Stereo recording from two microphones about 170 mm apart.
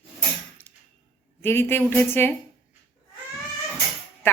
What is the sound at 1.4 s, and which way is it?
Speech, 15° left (ahead or behind).